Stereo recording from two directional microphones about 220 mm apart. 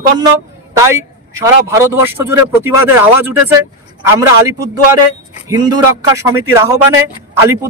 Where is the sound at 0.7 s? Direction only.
15° right (ahead or behind).